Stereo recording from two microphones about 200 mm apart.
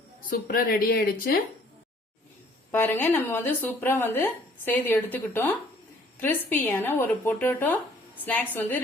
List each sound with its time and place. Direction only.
0.2 s a woman's voice: 45° left (ahead or behind)
2.7 s speech: 10° left (ahead or behind)